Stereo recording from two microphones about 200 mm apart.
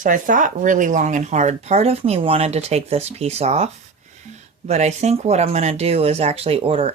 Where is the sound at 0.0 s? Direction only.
40° right (ahead or behind).